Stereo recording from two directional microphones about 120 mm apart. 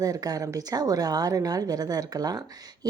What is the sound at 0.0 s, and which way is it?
A woman's voice, 30° right (ahead or behind).